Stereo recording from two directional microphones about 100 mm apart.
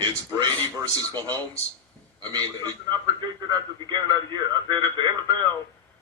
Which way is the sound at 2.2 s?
40° right (ahead or behind).